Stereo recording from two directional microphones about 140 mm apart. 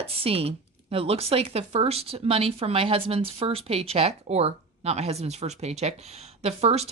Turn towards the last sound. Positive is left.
turn(degrees=-50)  # may be behind; listen again after turning